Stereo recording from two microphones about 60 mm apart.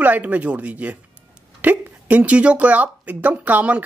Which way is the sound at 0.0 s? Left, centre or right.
Right.